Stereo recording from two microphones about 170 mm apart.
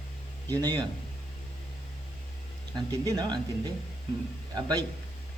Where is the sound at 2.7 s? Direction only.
20° right (ahead or behind).